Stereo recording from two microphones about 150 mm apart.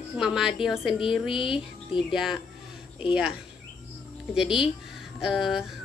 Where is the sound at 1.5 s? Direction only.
35° left (ahead or behind).